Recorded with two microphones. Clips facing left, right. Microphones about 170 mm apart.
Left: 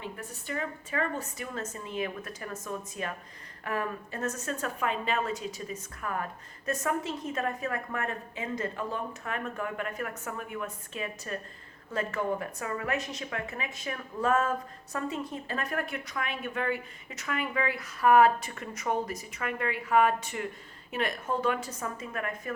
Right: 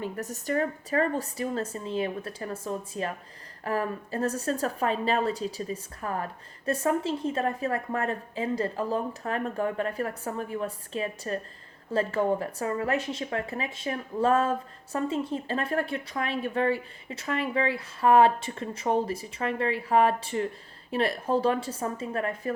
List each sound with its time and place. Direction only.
0.0 s a woman's voice: 40° right (ahead or behind)